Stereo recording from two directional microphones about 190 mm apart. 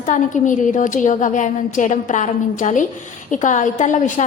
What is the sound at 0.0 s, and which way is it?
A woman's voice, 40° left (ahead or behind).